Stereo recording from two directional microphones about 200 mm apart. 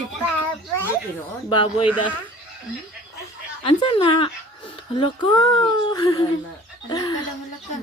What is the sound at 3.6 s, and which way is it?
Speech, 25° left (ahead or behind).